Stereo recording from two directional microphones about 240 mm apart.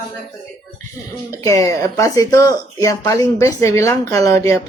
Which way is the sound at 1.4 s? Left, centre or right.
Centre.